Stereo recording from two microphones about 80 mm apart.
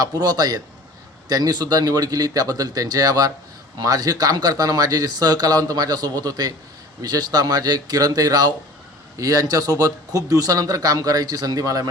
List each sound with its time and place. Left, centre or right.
0.0 s speech: right